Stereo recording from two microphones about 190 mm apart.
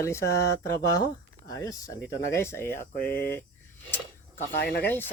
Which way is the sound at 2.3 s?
15° left (ahead or behind).